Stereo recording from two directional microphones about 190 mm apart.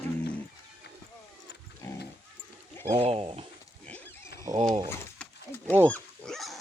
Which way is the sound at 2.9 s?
30° right (ahead or behind).